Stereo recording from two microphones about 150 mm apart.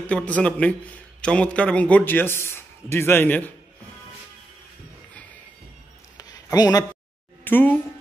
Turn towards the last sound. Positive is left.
turn(degrees=10)  # may be behind; listen again after turning